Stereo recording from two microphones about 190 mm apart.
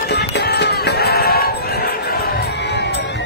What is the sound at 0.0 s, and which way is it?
Music, 60° left (ahead or behind).